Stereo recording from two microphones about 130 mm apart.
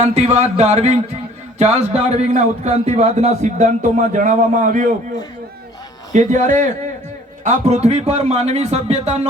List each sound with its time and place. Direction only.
0.0 s a man's voice: 60° right (ahead or behind); by 4.9 s 80° right
6.1 s a man's voice: 70° right (ahead or behind); by 9.2 s 55° right (ahead or behind)